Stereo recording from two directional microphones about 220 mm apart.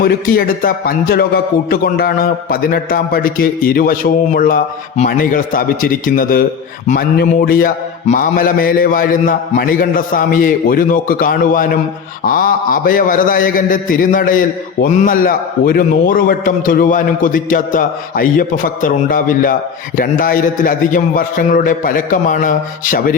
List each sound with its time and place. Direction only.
0.0 s a man's voice: 40° left (ahead or behind)